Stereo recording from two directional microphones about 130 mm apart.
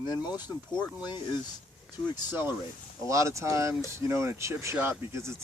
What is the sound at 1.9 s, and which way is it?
Speech, 15° right (ahead or behind).